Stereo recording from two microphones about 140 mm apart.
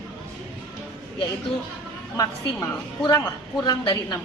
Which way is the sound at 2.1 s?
25° left (ahead or behind).